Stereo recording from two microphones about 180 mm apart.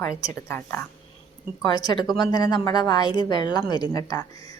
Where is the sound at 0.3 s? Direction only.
15° left (ahead or behind).